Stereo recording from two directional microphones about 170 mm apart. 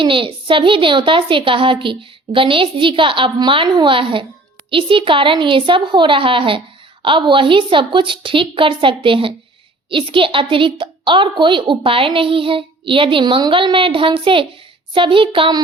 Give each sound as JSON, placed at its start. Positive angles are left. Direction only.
{"t": 0.0, "sound": "a woman's voice", "side_deg": -30}